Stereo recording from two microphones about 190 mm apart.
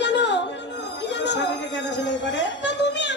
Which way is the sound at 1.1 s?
65° left (ahead or behind).